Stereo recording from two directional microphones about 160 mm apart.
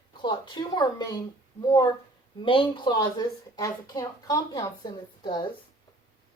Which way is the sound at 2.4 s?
35° left (ahead or behind).